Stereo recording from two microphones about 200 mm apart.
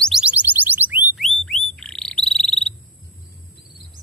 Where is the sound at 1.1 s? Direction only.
Centre (ahead or behind).